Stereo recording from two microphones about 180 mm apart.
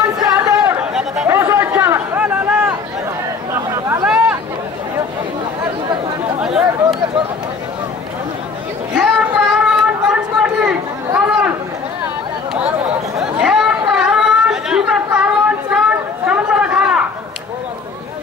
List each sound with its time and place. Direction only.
0.4 s chatter: 20° right (ahead or behind)
0.9 s chatter: 5° right (ahead or behind)
4.0 s a sound: 5° right (ahead or behind)
6.4 s chatter: 5° right (ahead or behind)
8.9 s a sound: 5° right (ahead or behind)
11.1 s chatter: 5° right (ahead or behind)
13.2 s chatter: 5° right (ahead or behind)